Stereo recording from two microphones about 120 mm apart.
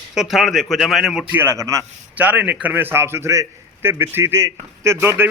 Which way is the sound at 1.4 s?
20° right (ahead or behind).